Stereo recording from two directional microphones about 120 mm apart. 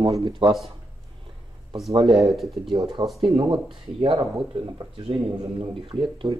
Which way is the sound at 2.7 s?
40° right (ahead or behind).